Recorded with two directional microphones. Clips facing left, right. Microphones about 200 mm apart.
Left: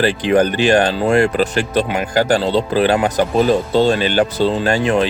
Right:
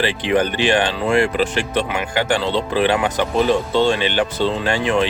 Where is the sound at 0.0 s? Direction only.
40° left (ahead or behind).